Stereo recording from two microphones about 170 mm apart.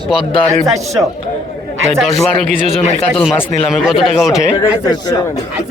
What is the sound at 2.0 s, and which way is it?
Speech, centre (ahead or behind).